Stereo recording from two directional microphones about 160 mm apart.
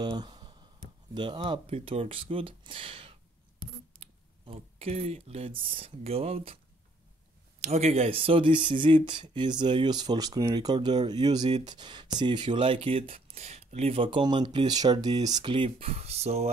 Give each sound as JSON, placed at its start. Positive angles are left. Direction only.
{"t": 0.0, "sound": "a sound", "side_deg": -30}
{"t": 1.1, "sound": "speech", "side_deg": -30}
{"t": 7.6, "sound": "speech", "side_deg": -40}